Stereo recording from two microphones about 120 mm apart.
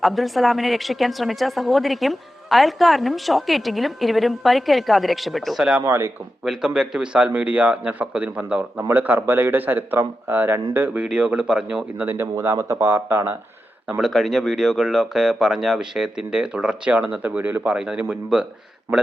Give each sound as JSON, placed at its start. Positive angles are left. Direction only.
{"t": 0.0, "sound": "speech", "side_deg": 0}
{"t": 5.8, "sound": "speech", "side_deg": -20}
{"t": 6.4, "sound": "a man's voice", "side_deg": -5}
{"t": 13.8, "sound": "speech", "side_deg": -5}